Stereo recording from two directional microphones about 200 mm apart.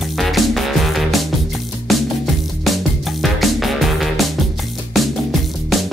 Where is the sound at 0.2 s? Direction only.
Centre (ahead or behind).